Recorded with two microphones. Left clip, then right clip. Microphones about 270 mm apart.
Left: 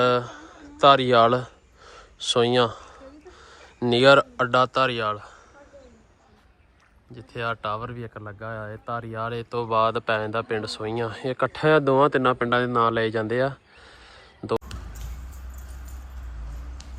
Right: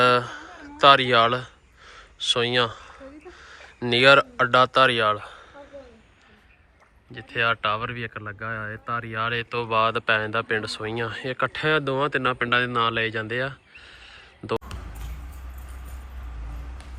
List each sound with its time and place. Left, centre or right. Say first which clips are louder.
0.0 s a sound: right 2 dB; centre
1.9 s speech: right 1 dB; left; by 5.4 s centre
7.1 s speech: right 6 dB; centre
9.1 s speech: right 3 dB; centre